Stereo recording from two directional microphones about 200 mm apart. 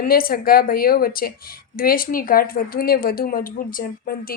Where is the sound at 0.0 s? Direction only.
45° left (ahead or behind).